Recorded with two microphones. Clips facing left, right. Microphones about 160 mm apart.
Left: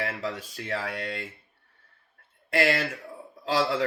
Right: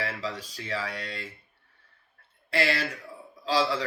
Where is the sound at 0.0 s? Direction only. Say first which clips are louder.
Left 2 dB; 50° left (ahead or behind).